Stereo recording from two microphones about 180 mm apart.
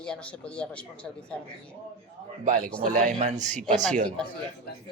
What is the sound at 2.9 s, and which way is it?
Speech, 50° right (ahead or behind).